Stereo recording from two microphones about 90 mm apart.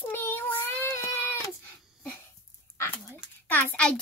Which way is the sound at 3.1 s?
20° left (ahead or behind).